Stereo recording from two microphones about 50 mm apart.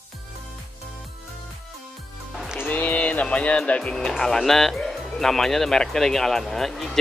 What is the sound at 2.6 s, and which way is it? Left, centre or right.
Speech, left.